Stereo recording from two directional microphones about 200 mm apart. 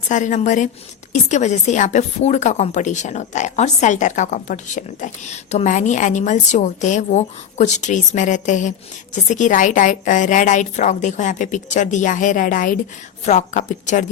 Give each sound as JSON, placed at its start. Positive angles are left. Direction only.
{"t": 0.1, "sound": "speech", "side_deg": 40}